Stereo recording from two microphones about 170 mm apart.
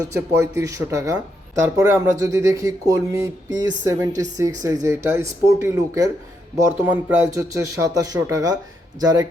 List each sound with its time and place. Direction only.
0.1 s speech: 15° right (ahead or behind)